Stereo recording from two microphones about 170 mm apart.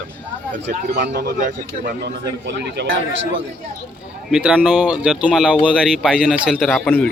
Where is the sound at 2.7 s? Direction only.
90° right.